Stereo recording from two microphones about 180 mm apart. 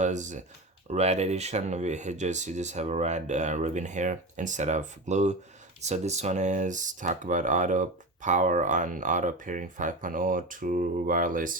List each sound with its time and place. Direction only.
0.0 s speech: 40° right (ahead or behind)